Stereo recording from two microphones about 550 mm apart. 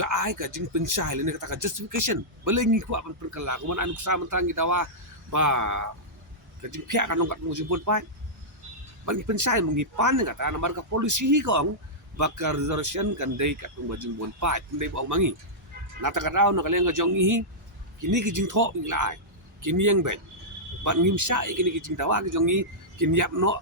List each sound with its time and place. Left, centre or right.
0.0 s speech: right
9.0 s speech: right